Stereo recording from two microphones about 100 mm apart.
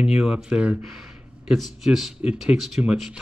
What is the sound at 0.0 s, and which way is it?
Speech, 5° right (ahead or behind).